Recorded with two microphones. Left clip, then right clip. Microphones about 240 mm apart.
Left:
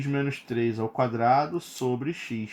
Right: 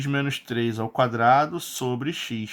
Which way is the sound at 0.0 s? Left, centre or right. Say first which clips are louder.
Right 3 dB; right.